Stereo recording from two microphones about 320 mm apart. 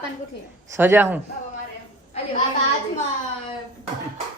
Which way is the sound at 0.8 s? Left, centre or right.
Centre.